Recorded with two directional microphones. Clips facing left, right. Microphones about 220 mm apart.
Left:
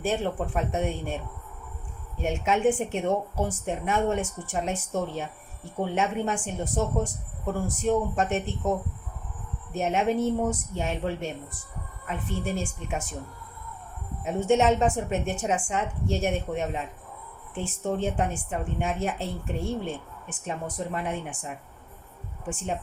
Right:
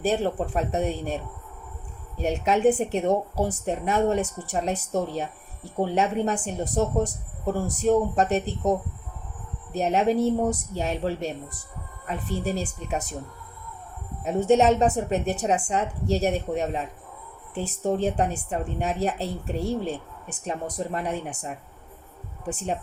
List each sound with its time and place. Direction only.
0.0 s a woman's voice: 35° right (ahead or behind)
9.7 s a woman's voice: 35° right (ahead or behind)
14.4 s a woman's voice: 40° right (ahead or behind)
22.4 s a woman's voice: 40° right (ahead or behind)